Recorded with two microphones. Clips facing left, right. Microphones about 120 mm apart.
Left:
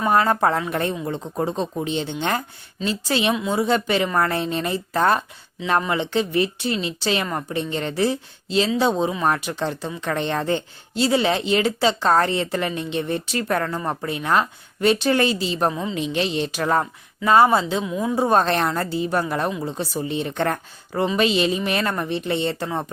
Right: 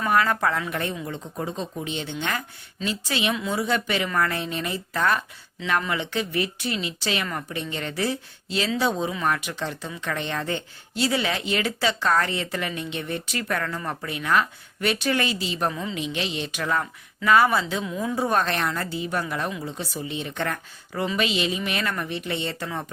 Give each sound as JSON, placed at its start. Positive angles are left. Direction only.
{"t": 0.0, "sound": "speech", "side_deg": 30}
{"t": 15.7, "sound": "a woman's voice", "side_deg": 25}
{"t": 16.0, "sound": "a woman's voice", "side_deg": 35}
{"t": 18.2, "sound": "speech", "side_deg": 30}